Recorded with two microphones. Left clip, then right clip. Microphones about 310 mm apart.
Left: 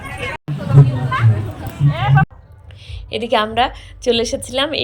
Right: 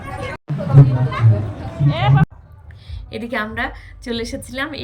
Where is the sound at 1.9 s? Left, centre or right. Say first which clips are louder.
Left 2 dB; left.